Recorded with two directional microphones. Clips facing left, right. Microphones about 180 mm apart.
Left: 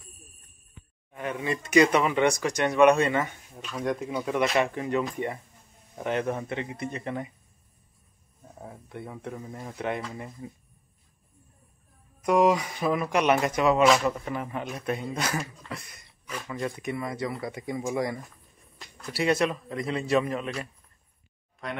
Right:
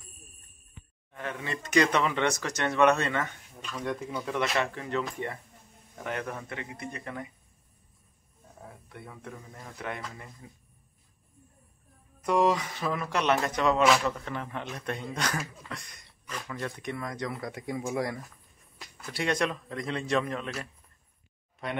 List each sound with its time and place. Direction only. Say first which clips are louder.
1.1 s speech: left 5 dB; 15° left (ahead or behind)
6.0 s speech: left 7 dB; 25° left (ahead or behind)
8.8 s speech: left 7 dB; 25° left (ahead or behind)
12.2 s a man's voice: left 3 dB; 10° left (ahead or behind)
18.8 s a sound: left 4 dB; 5° right (ahead or behind)
19.2 s a man's voice: left 4 dB; 5° left (ahead or behind)